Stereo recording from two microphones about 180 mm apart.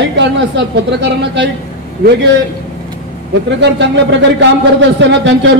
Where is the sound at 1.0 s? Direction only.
75° right (ahead or behind).